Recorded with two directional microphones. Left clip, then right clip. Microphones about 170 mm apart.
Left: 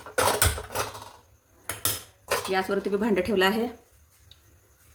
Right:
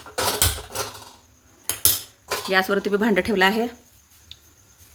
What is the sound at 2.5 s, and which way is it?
Speech, 35° right (ahead or behind).